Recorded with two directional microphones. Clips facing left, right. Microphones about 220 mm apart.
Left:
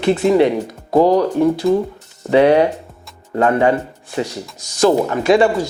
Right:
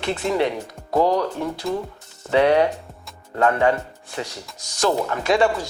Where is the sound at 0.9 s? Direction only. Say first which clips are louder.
Left 6 dB; 30° left (ahead or behind).